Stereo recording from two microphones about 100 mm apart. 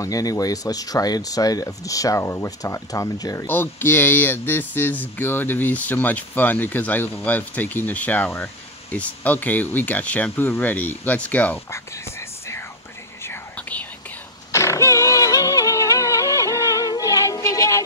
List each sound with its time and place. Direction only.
0.0 s speech: 35° left (ahead or behind)
3.4 s speech: 20° left (ahead or behind)
11.7 s whispering: 30° left (ahead or behind)
13.6 s whispering: 15° left (ahead or behind)
14.5 s music: 30° left (ahead or behind)